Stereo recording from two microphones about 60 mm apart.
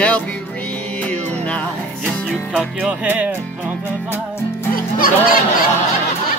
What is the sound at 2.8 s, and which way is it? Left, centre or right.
Music, right.